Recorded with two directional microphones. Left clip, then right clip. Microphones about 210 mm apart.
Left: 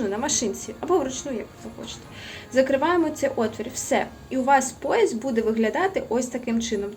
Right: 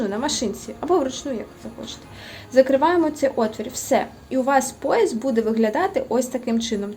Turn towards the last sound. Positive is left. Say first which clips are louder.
# right 4 dB
turn(degrees=-30)  # may be behind; listen again after turning